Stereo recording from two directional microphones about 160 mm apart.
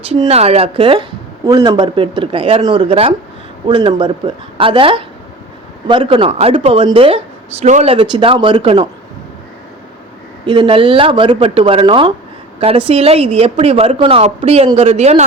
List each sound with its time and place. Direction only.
0.1 s a woman's voice: 40° right (ahead or behind)
10.4 s a woman's voice: 30° right (ahead or behind)